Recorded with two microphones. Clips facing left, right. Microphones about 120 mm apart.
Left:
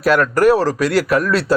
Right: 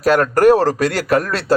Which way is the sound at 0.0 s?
35° right (ahead or behind).